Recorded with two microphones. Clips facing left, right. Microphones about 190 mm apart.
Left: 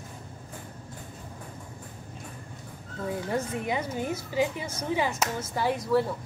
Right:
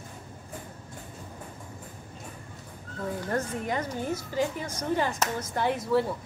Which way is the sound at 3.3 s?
10° left (ahead or behind).